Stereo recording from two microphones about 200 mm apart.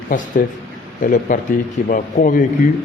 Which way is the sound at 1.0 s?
40° left (ahead or behind).